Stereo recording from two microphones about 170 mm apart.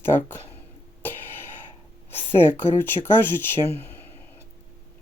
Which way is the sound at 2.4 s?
10° left (ahead or behind).